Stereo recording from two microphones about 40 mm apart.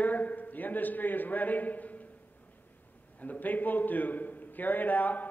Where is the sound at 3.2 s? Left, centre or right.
Left.